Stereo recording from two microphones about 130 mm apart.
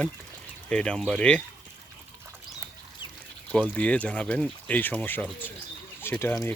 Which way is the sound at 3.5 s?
10° left (ahead or behind).